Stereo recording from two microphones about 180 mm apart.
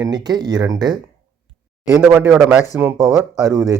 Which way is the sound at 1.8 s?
5° right (ahead or behind).